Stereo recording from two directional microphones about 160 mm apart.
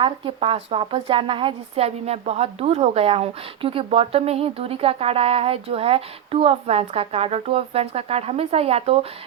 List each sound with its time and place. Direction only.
0.0 s a woman's voice: 35° right (ahead or behind)